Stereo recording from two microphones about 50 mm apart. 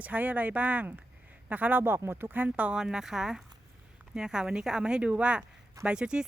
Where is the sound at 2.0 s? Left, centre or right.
Right.